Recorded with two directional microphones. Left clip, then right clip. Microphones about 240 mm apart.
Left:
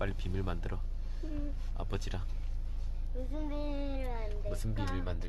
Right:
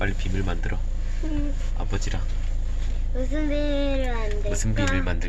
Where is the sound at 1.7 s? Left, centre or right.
Left.